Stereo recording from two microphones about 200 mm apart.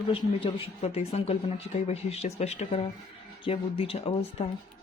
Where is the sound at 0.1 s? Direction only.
25° left (ahead or behind).